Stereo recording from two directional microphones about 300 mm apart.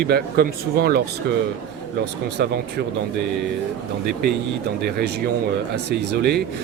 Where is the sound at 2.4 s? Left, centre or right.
Right.